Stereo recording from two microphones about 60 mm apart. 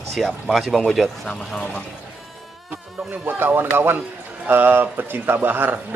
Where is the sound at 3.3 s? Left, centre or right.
Right.